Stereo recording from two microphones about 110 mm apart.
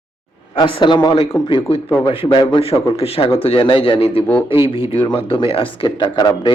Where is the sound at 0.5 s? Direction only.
45° left (ahead or behind).